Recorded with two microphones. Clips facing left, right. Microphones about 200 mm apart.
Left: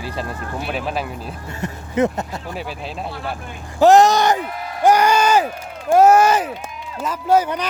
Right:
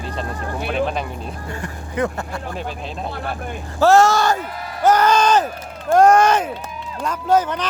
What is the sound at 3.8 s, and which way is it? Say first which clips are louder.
Speech: left 2 dB; 15° left (ahead or behind).